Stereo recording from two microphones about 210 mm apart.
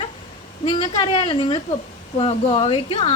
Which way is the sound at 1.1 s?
25° left (ahead or behind).